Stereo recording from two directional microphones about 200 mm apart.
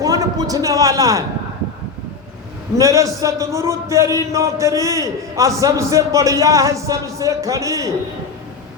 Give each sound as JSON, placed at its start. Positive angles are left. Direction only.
{"t": 0.0, "sound": "a man's voice", "side_deg": -20}
{"t": 2.7, "sound": "a man's voice", "side_deg": -15}